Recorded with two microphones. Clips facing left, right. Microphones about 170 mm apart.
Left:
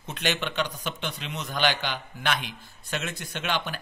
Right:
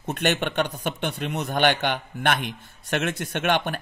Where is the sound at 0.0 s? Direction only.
55° right (ahead or behind).